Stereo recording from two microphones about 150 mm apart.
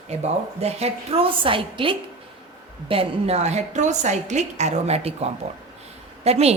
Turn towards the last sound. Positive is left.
turn(degrees=-45)  # may be behind; listen again after turning